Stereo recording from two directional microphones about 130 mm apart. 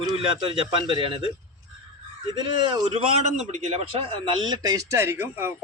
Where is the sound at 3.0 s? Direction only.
60° right (ahead or behind).